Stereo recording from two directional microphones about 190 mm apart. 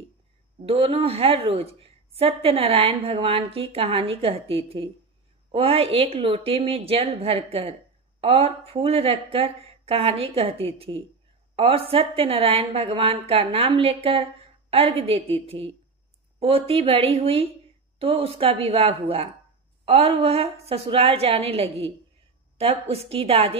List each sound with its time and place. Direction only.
0.6 s a woman's voice: 30° right (ahead or behind)